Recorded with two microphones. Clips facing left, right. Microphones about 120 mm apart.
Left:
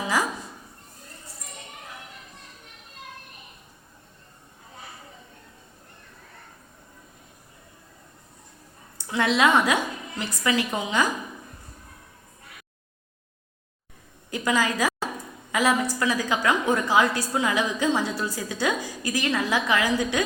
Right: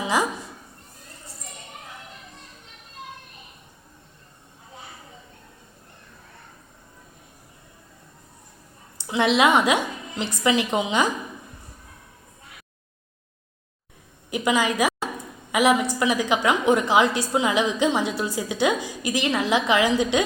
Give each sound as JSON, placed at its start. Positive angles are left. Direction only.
{"t": 0.0, "sound": "a sound", "side_deg": -25}
{"t": 9.0, "sound": "a woman's voice", "side_deg": -20}
{"t": 14.3, "sound": "a woman's voice", "side_deg": -15}